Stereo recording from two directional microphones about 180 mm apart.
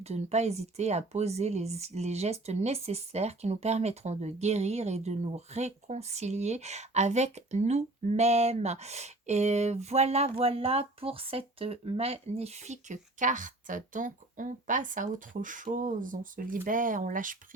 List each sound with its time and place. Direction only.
0.0 s speech: 35° right (ahead or behind)